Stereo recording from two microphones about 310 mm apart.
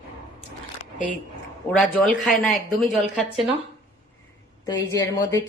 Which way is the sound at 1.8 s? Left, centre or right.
Centre.